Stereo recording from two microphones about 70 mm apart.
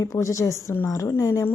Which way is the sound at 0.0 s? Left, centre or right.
Left.